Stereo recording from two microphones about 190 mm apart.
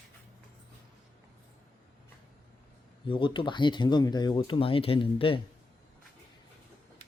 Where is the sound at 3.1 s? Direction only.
25° left (ahead or behind).